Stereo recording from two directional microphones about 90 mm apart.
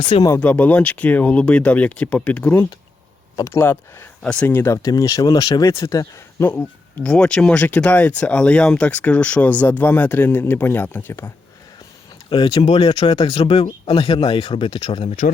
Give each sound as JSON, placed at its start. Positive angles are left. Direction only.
{"t": 0.3, "sound": "speech", "side_deg": 15}
{"t": 3.4, "sound": "speech", "side_deg": 30}
{"t": 4.2, "sound": "speech", "side_deg": 10}
{"t": 4.4, "sound": "speech", "side_deg": 25}
{"t": 4.8, "sound": "speech", "side_deg": 40}
{"t": 6.5, "sound": "speech", "side_deg": 15}
{"t": 12.3, "sound": "speech", "side_deg": 55}